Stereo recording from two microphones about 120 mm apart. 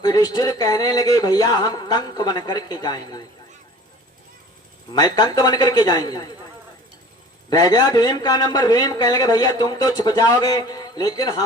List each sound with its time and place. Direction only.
0.0 s a man's voice: 35° left (ahead or behind)
4.9 s a man's voice: 35° left (ahead or behind)
7.5 s a man's voice: 35° left (ahead or behind)